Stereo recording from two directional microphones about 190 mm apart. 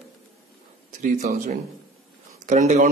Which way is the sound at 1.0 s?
45° right (ahead or behind).